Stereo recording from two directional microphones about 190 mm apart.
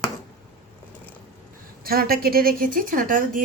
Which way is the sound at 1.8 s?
50° right (ahead or behind).